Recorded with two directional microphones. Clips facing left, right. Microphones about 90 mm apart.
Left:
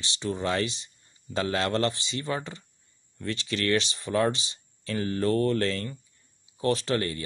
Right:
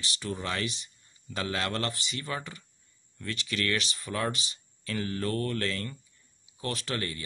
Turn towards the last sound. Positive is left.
turn(degrees=30)  # may be behind; listen again after turning